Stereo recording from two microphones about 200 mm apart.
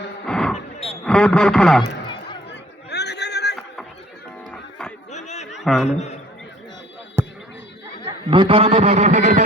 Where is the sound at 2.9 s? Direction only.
55° left (ahead or behind).